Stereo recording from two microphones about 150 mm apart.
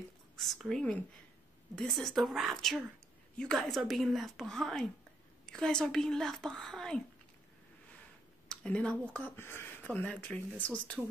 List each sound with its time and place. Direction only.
0.4 s speech: centre (ahead or behind)
8.5 s speech: 5° left (ahead or behind)